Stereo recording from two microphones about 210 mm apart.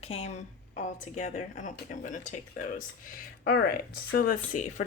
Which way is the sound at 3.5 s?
50° left (ahead or behind).